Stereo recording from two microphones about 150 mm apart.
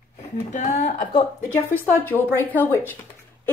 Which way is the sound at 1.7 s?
10° left (ahead or behind).